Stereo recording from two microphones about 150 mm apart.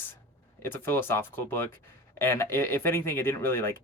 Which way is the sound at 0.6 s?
15° left (ahead or behind).